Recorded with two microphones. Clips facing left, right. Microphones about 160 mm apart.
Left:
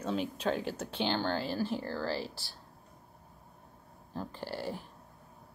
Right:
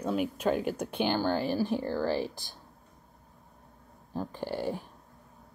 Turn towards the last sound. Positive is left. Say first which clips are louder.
# right 5 dB
turn(degrees=-15)  # may be behind; listen again after turning